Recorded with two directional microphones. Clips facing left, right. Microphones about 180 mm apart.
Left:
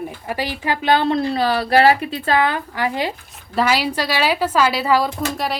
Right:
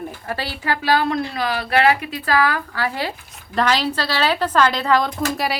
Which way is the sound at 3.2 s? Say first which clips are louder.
Right 1 dB; 5° left (ahead or behind).